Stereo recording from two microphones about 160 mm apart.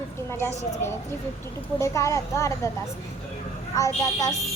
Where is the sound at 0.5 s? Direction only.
45° left (ahead or behind).